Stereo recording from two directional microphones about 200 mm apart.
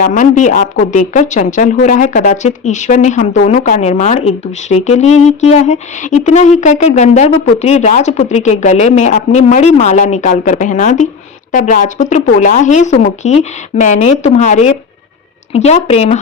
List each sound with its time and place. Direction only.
0.0 s speech: 40° left (ahead or behind)